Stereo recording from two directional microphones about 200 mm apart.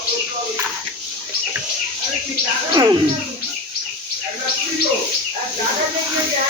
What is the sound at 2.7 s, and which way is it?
Speech, 25° right (ahead or behind).